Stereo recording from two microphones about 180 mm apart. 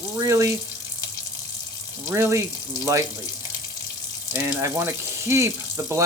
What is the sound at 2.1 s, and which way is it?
Speech, 15° right (ahead or behind).